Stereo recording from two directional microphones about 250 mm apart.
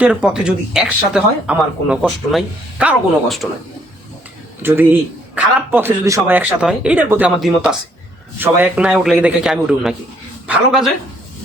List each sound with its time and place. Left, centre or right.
0.0 s speech: centre
4.6 s speech: centre